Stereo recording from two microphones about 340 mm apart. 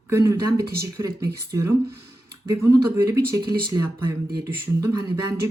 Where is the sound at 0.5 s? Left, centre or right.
Right.